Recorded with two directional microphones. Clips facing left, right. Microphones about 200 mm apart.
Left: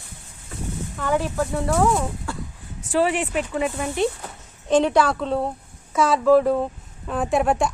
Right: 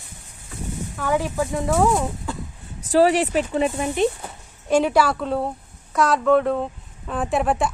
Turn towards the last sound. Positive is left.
turn(degrees=0)  # may be behind; listen again after turning